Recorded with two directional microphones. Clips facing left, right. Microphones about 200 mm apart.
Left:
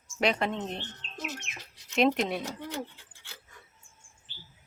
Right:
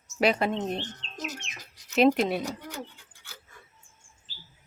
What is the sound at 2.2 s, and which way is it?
Speech, centre (ahead or behind).